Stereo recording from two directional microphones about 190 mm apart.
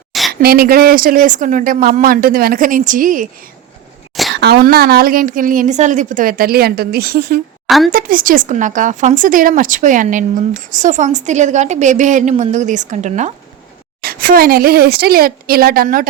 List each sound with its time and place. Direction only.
0.1 s a sound: centre (ahead or behind)
0.4 s a woman's voice: 55° right (ahead or behind)
4.4 s a woman's voice: 60° right (ahead or behind); by 13.3 s 40° right (ahead or behind)
14.0 s a woman's voice: 50° right (ahead or behind)